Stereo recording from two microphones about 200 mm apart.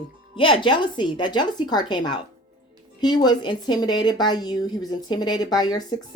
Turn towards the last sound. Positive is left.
turn(degrees=20)  # may be behind; listen again after turning